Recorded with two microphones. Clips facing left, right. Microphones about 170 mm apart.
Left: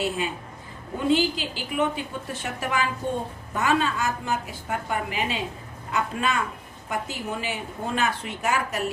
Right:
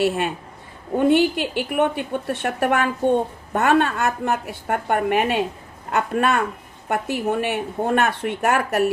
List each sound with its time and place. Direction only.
0.0 s speech: 65° right (ahead or behind)